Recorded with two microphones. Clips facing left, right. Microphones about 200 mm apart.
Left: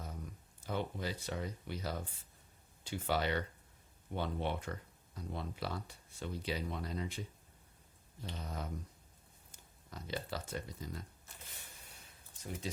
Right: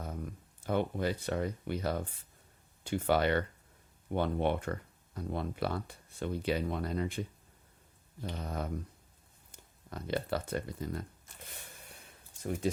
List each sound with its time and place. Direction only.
0.0 s speech: 55° right (ahead or behind)
9.9 s speech: 60° right (ahead or behind)
12.4 s speech: 55° right (ahead or behind)